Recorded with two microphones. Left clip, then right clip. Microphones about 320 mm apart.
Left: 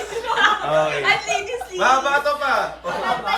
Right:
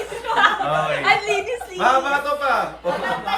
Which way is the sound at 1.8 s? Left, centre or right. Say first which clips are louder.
Left 1 dB; centre.